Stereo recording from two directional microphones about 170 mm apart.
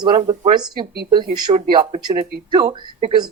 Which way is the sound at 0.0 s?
25° right (ahead or behind).